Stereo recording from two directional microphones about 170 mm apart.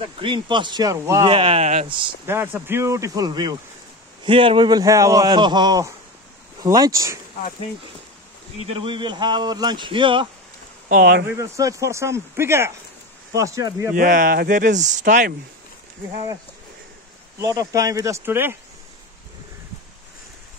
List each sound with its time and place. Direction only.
0.2 s speech: 30° right (ahead or behind)
2.2 s speech: 15° right (ahead or behind)
8.5 s speech: 35° right (ahead or behind)
10.9 s speech: 60° right (ahead or behind)
11.2 s speech: 15° right (ahead or behind)
13.9 s speech: 55° right (ahead or behind)
17.4 s speech: 20° right (ahead or behind)